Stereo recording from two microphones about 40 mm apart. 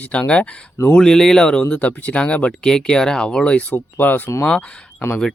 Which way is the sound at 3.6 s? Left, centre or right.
Left.